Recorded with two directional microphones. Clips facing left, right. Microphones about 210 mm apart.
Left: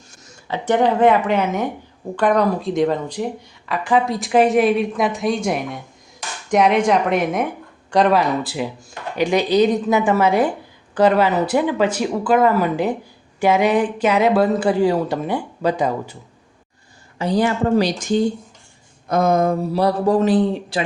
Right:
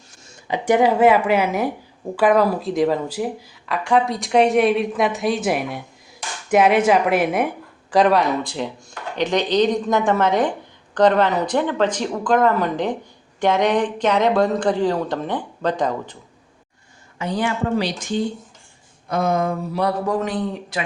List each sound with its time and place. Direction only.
0.4 s speech: 15° right (ahead or behind); by 16.1 s 10° left (ahead or behind)
17.2 s a man's voice: 35° left (ahead or behind)